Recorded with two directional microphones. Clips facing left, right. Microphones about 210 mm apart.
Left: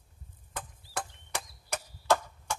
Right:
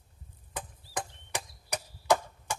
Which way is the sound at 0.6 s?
15° right (ahead or behind).